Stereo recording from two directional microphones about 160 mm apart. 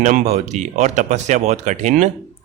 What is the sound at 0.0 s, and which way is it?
Speech, 50° right (ahead or behind).